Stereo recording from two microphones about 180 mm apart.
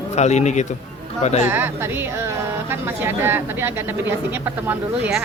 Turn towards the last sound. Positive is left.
turn(degrees=-10)  # may be behind; listen again after turning